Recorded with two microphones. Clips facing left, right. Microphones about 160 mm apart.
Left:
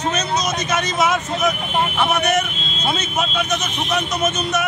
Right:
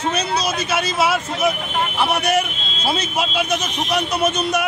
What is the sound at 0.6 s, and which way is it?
Speech, 30° right (ahead or behind).